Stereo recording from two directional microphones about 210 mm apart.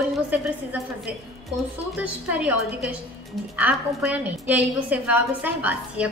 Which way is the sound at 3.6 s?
5° right (ahead or behind).